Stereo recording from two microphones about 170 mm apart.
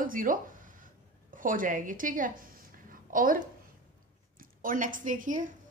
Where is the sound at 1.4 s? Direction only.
50° right (ahead or behind).